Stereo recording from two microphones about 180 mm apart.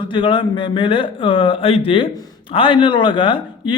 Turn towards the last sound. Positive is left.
turn(degrees=25)  # may be behind; listen again after turning